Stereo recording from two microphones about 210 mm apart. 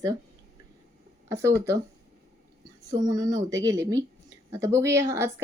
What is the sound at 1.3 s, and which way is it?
Speech, 15° right (ahead or behind).